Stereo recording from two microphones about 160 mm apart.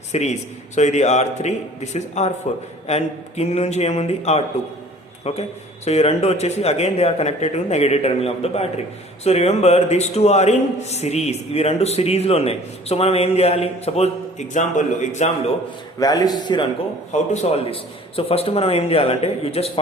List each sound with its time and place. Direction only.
0.1 s a man's voice: 45° left (ahead or behind)
16.0 s a man's voice: 25° left (ahead or behind)
17.1 s a man's voice: 45° left (ahead or behind)